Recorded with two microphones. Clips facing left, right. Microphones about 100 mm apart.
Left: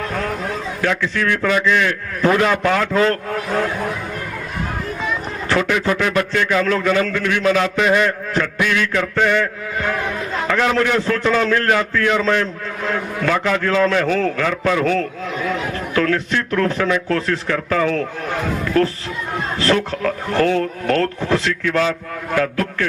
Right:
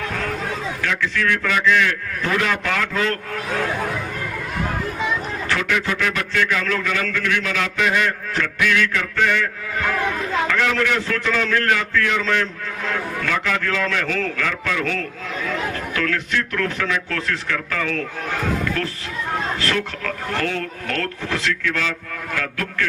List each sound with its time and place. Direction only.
0.8 s a man's voice: 35° left (ahead or behind)
5.5 s a man's voice: 35° left (ahead or behind)
10.6 s a man's voice: 35° left (ahead or behind)